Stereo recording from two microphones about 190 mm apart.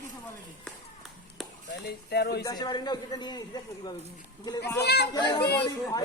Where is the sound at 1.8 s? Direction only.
60° left (ahead or behind).